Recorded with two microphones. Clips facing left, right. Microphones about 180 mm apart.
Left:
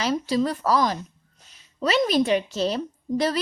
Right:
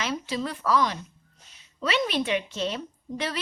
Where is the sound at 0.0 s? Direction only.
40° left (ahead or behind).